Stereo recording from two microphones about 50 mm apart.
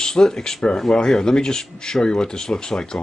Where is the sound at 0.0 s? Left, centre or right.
Centre.